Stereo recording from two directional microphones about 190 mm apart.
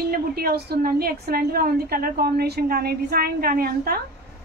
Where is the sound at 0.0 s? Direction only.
55° right (ahead or behind).